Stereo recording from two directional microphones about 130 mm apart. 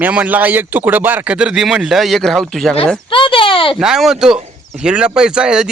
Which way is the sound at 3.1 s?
40° left (ahead or behind).